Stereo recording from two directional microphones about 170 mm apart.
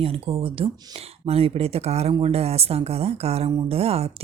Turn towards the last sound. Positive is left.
turn(degrees=-35)  # may be behind; listen again after turning